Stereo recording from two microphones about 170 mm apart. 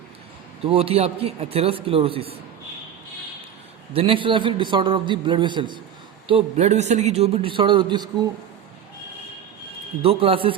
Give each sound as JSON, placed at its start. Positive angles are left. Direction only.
{"t": 0.6, "sound": "a man's voice", "side_deg": -35}
{"t": 3.9, "sound": "a man's voice", "side_deg": -30}
{"t": 10.0, "sound": "a man's voice", "side_deg": -35}